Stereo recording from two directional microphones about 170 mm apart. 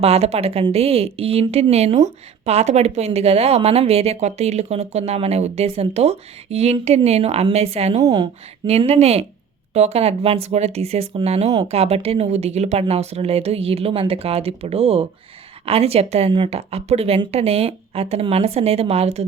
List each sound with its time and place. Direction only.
0.0 s a woman's voice: 35° right (ahead or behind)
8.0 s a woman's voice: 25° right (ahead or behind)
8.6 s a woman's voice: 40° right (ahead or behind)